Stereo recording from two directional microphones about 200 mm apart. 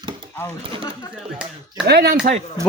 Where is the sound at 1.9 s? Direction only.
55° right (ahead or behind).